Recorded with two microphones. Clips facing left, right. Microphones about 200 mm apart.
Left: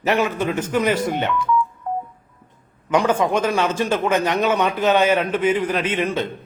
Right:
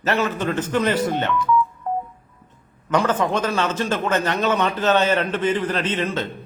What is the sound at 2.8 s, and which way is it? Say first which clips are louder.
A man's voice: left 2 dB; 15° left (ahead or behind).